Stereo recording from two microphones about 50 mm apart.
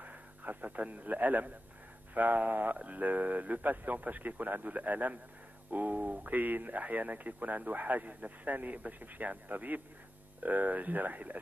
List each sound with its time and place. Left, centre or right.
0.0 s a man's voice: right